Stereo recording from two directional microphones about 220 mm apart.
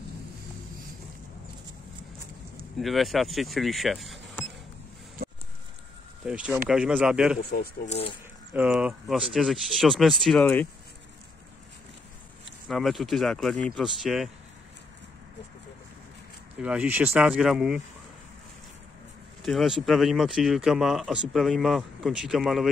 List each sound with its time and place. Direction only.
2.8 s speech: centre (ahead or behind)
6.2 s speech: 5° right (ahead or behind)
7.5 s speech: 45° left (ahead or behind)
7.9 s speech: 25° left (ahead or behind)
8.5 s speech: 5° right (ahead or behind)
12.6 s speech: centre (ahead or behind)
16.5 s speech: 5° right (ahead or behind)
19.4 s speech: centre (ahead or behind)